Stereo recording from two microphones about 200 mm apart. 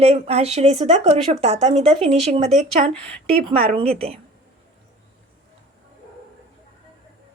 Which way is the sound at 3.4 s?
30° right (ahead or behind).